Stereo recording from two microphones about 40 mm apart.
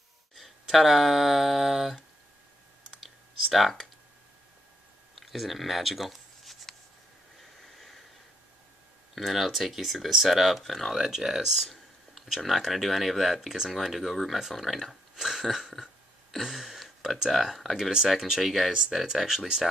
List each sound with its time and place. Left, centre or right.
0.3 s speech: centre
3.0 s computer keyboard: centre
5.1 s a sound: centre
9.1 s speech: centre
10.9 s speech: centre
11.7 s a sound: centre
12.4 s speech: centre
16.4 s a sound: centre
17.3 s speech: centre
18.7 s speech: centre